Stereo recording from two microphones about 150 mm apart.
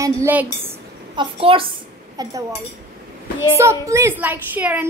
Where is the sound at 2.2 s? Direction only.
25° right (ahead or behind).